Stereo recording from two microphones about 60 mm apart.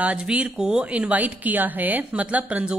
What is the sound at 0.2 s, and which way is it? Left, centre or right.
Speech, centre.